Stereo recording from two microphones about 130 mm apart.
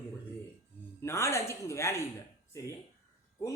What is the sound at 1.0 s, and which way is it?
Speech, 20° left (ahead or behind).